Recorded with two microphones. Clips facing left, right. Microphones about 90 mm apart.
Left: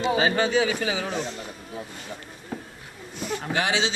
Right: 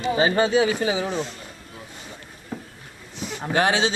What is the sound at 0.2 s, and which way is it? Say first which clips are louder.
Speech: right 6 dB; 35° right (ahead or behind).